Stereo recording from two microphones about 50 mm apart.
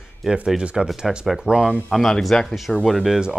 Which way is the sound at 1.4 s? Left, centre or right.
Centre.